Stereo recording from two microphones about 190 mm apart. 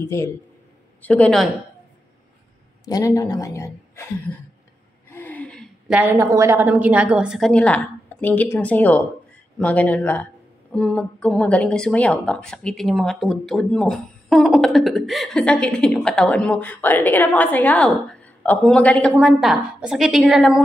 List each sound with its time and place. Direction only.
0.0 s a woman's voice: 15° left (ahead or behind)
2.8 s a woman's voice: 20° left (ahead or behind)
5.1 s gasp: 10° left (ahead or behind)
5.9 s a woman's voice: 10° right (ahead or behind)